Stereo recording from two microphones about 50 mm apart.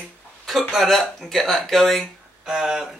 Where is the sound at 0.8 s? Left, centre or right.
Centre.